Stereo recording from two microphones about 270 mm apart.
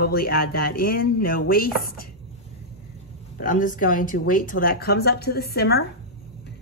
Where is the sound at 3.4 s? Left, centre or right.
Left.